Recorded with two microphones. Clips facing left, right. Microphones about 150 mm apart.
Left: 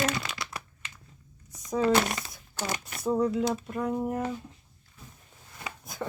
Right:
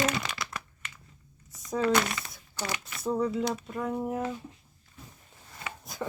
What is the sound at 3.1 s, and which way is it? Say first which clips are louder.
Speech: left 2 dB; centre (ahead or behind).